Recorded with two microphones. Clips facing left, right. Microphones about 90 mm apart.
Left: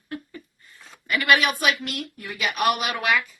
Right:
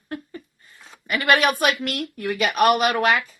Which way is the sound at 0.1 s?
30° right (ahead or behind).